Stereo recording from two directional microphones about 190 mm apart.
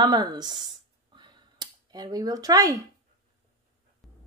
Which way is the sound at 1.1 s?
25° right (ahead or behind).